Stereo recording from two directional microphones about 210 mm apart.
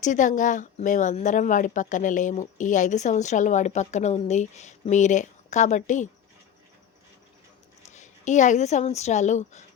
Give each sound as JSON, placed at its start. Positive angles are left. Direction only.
{"t": 0.0, "sound": "speech", "side_deg": 35}
{"t": 7.9, "sound": "a woman's voice", "side_deg": 35}